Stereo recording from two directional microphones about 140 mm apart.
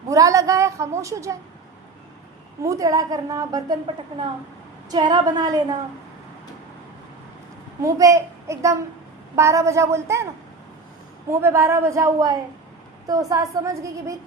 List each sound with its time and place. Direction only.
0.1 s a sound: 25° right (ahead or behind)
2.6 s a woman's voice: 25° right (ahead or behind)
4.9 s a woman's voice: 30° right (ahead or behind)
7.8 s a child's voice: 25° right (ahead or behind)
11.3 s a woman's voice: 20° right (ahead or behind)